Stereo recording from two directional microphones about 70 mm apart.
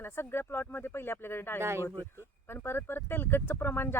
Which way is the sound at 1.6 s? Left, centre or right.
Right.